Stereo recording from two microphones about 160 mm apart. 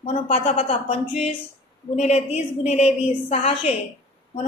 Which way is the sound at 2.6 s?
40° left (ahead or behind).